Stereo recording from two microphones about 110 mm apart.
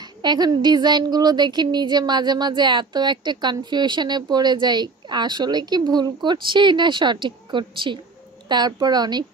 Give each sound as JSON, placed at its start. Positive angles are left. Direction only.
{"t": 0.2, "sound": "a woman's voice", "side_deg": -40}